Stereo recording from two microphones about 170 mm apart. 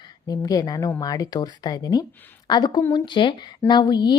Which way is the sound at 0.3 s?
20° left (ahead or behind).